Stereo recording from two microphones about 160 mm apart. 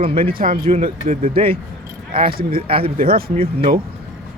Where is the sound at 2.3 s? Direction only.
65° right (ahead or behind).